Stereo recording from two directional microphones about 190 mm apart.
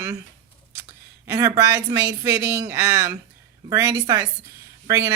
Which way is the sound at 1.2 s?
15° right (ahead or behind).